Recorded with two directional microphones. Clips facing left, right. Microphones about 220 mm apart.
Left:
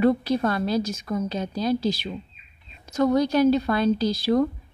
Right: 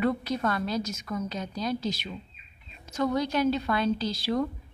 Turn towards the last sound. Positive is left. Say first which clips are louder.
# left 7 dB
turn(degrees=40)  # may be behind; listen again after turning